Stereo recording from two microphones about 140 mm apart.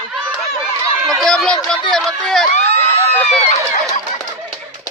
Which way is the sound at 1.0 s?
Centre (ahead or behind).